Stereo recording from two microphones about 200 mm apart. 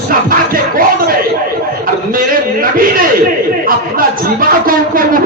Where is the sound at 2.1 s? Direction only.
45° right (ahead or behind).